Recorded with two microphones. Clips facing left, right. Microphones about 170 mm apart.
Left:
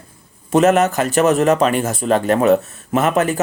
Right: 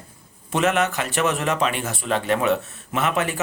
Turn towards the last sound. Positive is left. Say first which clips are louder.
# left 7 dB
turn(degrees=40)  # may be behind; listen again after turning